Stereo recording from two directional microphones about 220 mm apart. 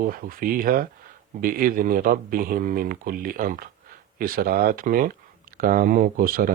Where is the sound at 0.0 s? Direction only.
40° right (ahead or behind).